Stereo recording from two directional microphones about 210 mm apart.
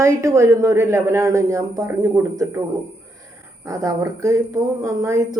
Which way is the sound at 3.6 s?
15° right (ahead or behind).